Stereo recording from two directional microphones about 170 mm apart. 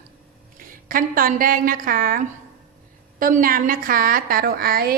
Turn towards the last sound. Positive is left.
turn(degrees=-60)  # may be behind; listen again after turning